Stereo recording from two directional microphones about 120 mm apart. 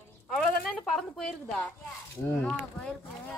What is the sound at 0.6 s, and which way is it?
A woman's voice, centre (ahead or behind).